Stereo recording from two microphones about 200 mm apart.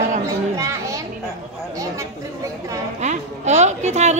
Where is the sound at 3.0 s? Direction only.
35° right (ahead or behind).